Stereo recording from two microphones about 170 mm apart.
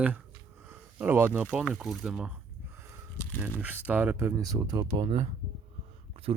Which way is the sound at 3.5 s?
10° right (ahead or behind).